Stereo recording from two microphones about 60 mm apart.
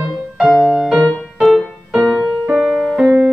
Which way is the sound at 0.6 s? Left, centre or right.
Centre.